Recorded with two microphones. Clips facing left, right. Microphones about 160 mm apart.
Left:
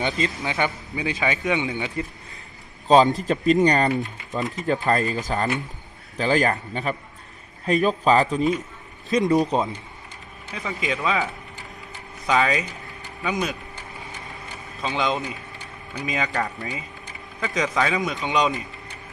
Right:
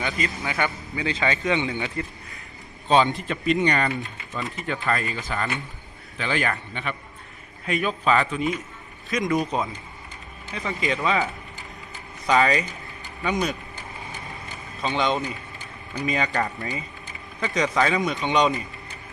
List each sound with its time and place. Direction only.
0.0 s a man's voice: 25° left (ahead or behind)
2.8 s speech: 40° left (ahead or behind)
10.5 s a man's voice: centre (ahead or behind)
14.8 s a man's voice: centre (ahead or behind)